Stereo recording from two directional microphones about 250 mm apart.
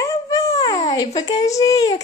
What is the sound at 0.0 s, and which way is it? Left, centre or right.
A child's voice, centre.